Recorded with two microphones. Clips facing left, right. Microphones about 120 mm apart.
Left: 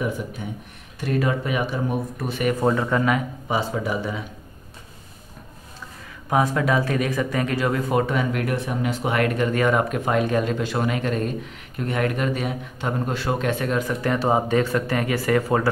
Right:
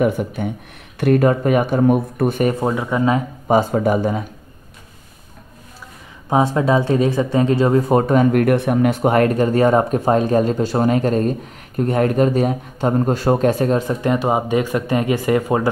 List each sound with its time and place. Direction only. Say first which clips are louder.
0.0 s speech: right 9 dB; 65° right (ahead or behind)
2.6 s speech: right 1 dB; 10° right (ahead or behind)
3.4 s speech: right 11 dB; 50° right (ahead or behind)
6.3 s speech: right 5 dB; 25° right (ahead or behind); by 9.1 s 55° right (ahead or behind)
9.1 s speech: right 6 dB; 40° right (ahead or behind); by 15.7 s 20° right (ahead or behind)